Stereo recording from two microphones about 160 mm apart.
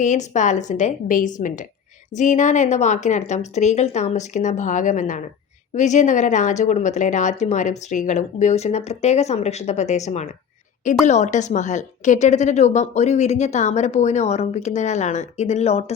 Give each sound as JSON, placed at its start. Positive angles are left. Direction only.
{"t": 0.0, "sound": "a woman's voice", "side_deg": 50}